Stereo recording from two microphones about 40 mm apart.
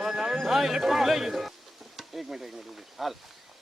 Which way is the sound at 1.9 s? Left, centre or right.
Centre.